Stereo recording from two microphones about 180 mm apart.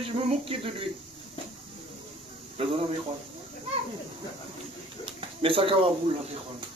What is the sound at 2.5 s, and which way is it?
Speech, 30° right (ahead or behind).